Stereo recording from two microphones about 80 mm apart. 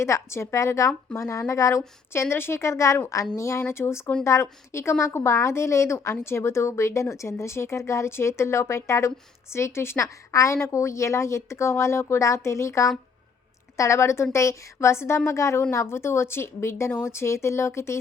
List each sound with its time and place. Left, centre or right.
0.0 s a woman's voice: left